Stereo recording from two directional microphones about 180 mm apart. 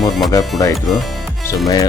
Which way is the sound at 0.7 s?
Centre (ahead or behind).